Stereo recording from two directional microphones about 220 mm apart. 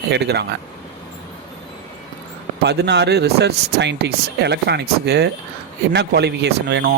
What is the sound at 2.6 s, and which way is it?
Speech, 50° right (ahead or behind).